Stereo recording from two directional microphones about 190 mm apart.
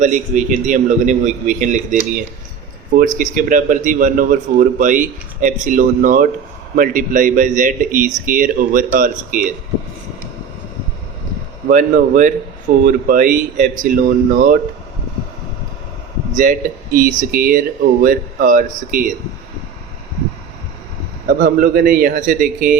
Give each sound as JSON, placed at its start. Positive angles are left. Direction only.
{"t": 0.0, "sound": "a man's voice", "side_deg": -40}
{"t": 11.7, "sound": "a man's voice", "side_deg": -45}
{"t": 16.3, "sound": "a man's voice", "side_deg": -45}
{"t": 21.2, "sound": "a man's voice", "side_deg": -50}